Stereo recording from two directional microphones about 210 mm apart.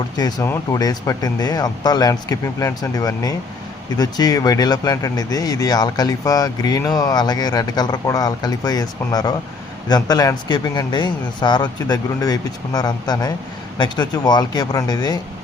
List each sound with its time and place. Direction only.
0.2 s speech: 20° left (ahead or behind)